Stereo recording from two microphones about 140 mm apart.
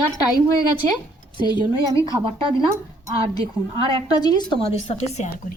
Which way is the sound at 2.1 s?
35° right (ahead or behind).